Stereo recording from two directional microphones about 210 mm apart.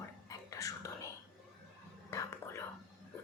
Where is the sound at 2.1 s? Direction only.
10° left (ahead or behind).